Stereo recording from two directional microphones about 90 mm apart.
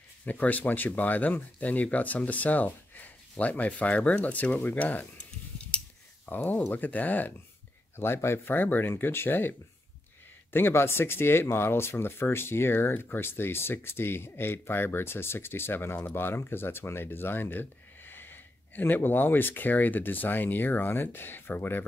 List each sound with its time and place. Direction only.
0.2 s speech: 15° left (ahead or behind)
6.2 s speech: 20° left (ahead or behind)